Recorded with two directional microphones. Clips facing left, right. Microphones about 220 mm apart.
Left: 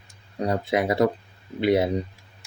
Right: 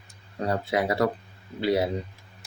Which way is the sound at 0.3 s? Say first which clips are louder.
Left 2 dB; 20° left (ahead or behind).